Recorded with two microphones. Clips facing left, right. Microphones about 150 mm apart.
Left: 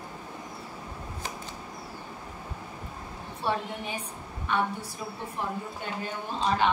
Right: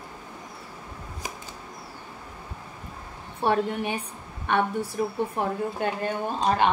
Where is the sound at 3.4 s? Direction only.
65° right (ahead or behind).